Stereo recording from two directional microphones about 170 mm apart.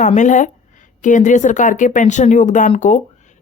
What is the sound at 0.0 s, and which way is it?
A woman's voice, 45° left (ahead or behind).